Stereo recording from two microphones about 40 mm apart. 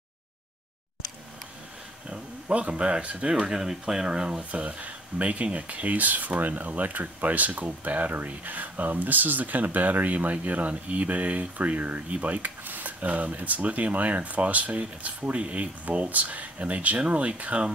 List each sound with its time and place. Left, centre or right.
2.0 s speech: right
3.5 s speech: centre
4.5 s speech: right